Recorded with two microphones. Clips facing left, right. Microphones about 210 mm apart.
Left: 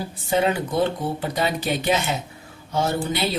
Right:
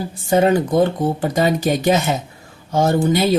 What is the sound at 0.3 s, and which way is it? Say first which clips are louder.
Speech: right 7 dB; 45° right (ahead or behind).